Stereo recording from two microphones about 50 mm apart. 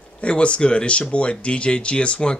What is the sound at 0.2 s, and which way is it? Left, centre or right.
Speech, left.